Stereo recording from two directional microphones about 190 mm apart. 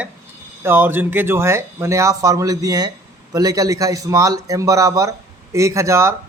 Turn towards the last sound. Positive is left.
turn(degrees=-15)  # may be behind; listen again after turning